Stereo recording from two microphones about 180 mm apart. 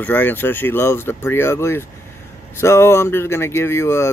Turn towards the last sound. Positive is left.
turn(degrees=15)  # may be behind; listen again after turning